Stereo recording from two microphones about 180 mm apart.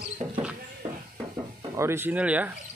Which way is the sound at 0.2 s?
35° right (ahead or behind).